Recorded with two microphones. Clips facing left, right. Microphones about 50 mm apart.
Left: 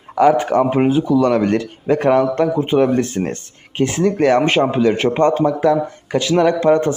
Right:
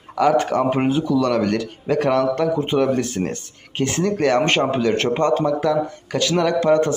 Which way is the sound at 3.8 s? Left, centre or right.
Centre.